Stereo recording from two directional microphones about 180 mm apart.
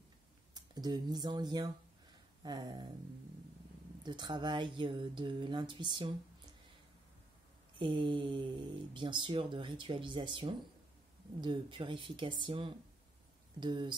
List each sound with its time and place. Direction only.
0.6 s speech: 20° right (ahead or behind)
4.0 s speech: 25° right (ahead or behind)
7.8 s speech: 25° right (ahead or behind)